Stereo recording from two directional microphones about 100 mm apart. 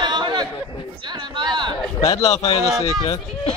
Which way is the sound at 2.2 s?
85° left.